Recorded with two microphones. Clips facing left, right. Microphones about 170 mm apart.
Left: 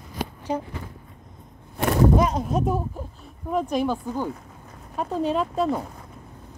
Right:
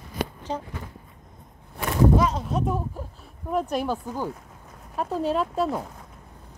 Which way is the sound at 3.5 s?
5° right (ahead or behind).